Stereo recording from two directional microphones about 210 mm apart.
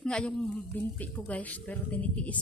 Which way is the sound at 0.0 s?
5° left (ahead or behind).